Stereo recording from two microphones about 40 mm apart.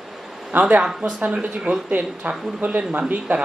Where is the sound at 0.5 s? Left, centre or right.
Right.